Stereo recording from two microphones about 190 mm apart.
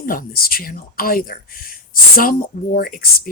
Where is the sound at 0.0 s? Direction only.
50° left (ahead or behind).